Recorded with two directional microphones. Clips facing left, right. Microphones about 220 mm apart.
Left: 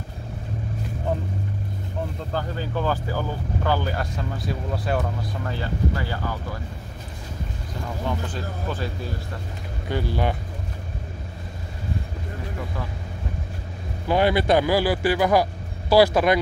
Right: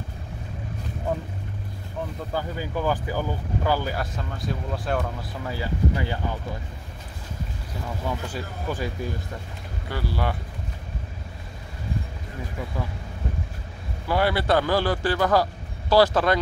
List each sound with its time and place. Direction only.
2.3 s speech: 10° right (ahead or behind)
8.3 s speech: 10° right (ahead or behind)
9.8 s speech: 20° left (ahead or behind)
14.0 s speech: 20° left (ahead or behind)